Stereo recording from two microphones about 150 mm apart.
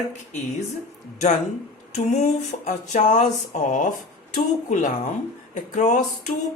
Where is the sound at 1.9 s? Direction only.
50° left (ahead or behind).